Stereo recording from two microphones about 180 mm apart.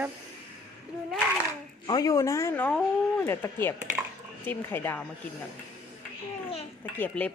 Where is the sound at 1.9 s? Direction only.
20° left (ahead or behind).